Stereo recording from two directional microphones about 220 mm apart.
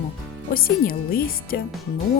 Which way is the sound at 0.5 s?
40° left (ahead or behind).